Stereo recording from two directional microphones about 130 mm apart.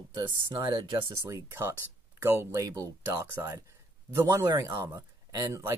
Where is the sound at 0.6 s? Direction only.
35° right (ahead or behind).